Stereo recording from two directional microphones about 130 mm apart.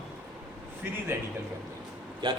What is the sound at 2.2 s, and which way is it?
Speech, 35° right (ahead or behind).